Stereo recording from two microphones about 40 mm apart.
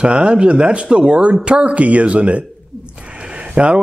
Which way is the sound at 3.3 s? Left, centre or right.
Right.